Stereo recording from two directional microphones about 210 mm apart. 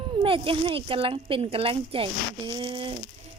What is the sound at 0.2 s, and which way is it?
Speech, 25° right (ahead or behind).